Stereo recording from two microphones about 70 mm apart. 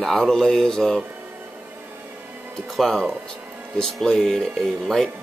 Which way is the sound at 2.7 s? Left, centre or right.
Centre.